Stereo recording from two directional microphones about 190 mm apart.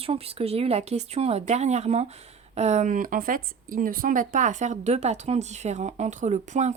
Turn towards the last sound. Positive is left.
turn(degrees=-40)  # may be behind; listen again after turning